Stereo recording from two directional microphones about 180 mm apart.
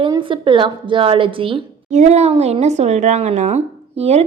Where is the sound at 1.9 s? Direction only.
40° right (ahead or behind).